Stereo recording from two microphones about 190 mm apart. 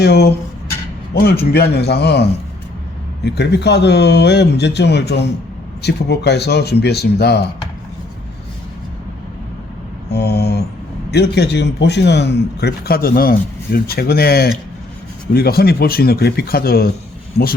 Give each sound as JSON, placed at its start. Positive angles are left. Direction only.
{"t": 0.0, "sound": "a man's voice", "side_deg": 60}
{"t": 10.1, "sound": "mantra", "side_deg": 60}
{"t": 11.1, "sound": "a man's voice", "side_deg": 60}